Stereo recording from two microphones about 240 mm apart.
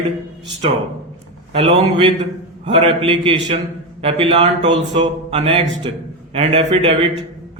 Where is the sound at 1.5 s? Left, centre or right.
Right.